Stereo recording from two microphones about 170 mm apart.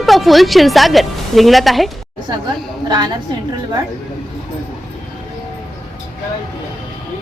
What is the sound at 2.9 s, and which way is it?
Speech, 25° right (ahead or behind).